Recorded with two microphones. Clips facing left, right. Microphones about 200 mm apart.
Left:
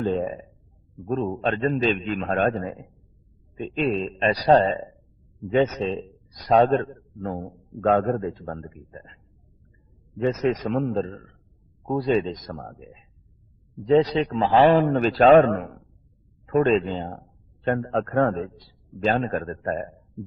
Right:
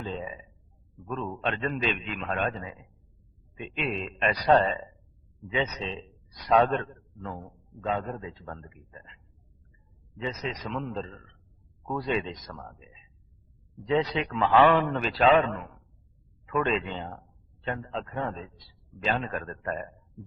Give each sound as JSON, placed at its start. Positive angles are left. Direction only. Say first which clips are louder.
{"t": 0.0, "sound": "a man's voice", "louder": "left 11 dB", "side_deg": 55}
{"t": 1.0, "sound": "a man's voice", "louder": "left 7 dB", "side_deg": 40}
{"t": 3.5, "sound": "a man's voice", "louder": "left 8 dB", "side_deg": 40}
{"t": 7.9, "sound": "a man's voice", "louder": "left 10 dB", "side_deg": 55}
{"t": 13.8, "sound": "a man's voice", "louder": "left 8 dB", "side_deg": 40}
{"t": 16.5, "sound": "a man's voice", "louder": "left 8 dB", "side_deg": 40}
{"t": 17.6, "sound": "a man's voice", "louder": "left 10 dB", "side_deg": 55}
{"t": 18.9, "sound": "a man's voice", "louder": "left 7 dB", "side_deg": 45}